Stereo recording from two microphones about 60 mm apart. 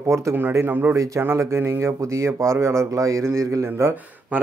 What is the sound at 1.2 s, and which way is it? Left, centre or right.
Speech, right.